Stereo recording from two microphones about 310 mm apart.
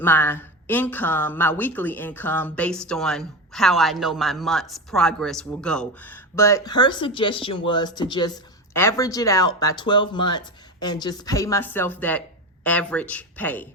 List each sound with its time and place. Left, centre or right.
0.0 s a woman's voice: centre